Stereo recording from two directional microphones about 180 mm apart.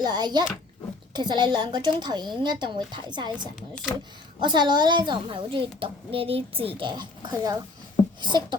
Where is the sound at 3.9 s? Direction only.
20° left (ahead or behind).